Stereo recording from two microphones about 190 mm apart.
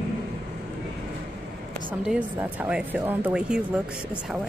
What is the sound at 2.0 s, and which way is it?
Speech, 10° right (ahead or behind).